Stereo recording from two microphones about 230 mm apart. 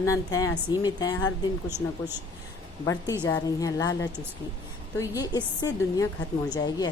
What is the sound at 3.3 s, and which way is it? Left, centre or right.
A woman's voice, centre.